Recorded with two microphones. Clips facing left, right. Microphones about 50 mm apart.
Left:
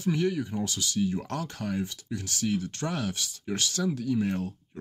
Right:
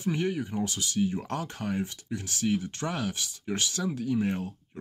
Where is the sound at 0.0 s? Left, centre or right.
Centre.